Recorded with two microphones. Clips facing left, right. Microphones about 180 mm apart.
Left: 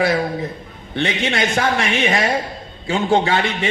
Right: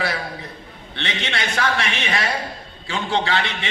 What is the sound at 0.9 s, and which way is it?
A man's voice, 45° left (ahead or behind).